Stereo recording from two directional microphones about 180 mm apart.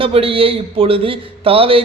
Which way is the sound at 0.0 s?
30° right (ahead or behind).